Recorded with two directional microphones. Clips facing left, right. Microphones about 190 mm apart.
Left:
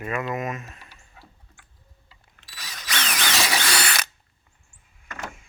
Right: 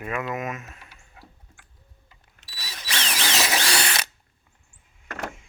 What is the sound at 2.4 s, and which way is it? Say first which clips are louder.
Drill: right 1 dB; 30° right (ahead or behind).